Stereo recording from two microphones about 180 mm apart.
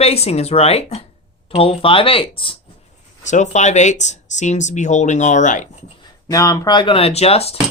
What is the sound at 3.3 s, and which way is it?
Speech, 40° left (ahead or behind).